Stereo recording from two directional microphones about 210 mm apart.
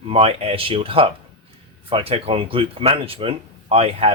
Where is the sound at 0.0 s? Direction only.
25° right (ahead or behind).